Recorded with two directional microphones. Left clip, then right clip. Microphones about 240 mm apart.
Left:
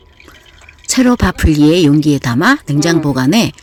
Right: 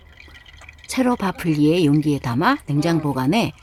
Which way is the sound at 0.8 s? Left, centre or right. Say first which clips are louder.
Left 8 dB; centre.